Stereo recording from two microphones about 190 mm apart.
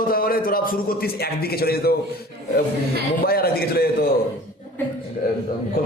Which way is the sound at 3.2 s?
55° left (ahead or behind).